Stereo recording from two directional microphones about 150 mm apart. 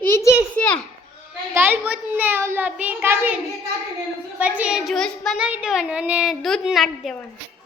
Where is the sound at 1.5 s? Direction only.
15° right (ahead or behind).